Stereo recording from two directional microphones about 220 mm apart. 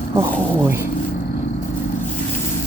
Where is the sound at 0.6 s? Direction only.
10° right (ahead or behind).